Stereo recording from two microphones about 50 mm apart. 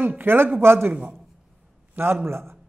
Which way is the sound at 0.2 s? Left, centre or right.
Right.